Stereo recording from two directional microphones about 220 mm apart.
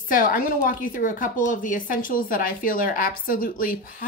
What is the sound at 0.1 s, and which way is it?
A woman's voice, 40° left (ahead or behind).